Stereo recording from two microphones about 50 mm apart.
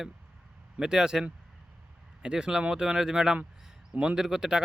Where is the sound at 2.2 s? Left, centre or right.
Centre.